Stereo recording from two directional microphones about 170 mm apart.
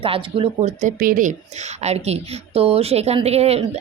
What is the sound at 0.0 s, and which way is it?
Speech, 35° right (ahead or behind).